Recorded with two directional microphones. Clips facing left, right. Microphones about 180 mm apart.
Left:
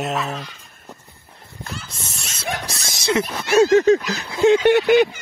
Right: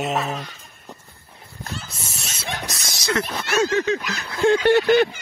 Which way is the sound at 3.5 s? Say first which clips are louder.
Left 8 dB; 40° left (ahead or behind).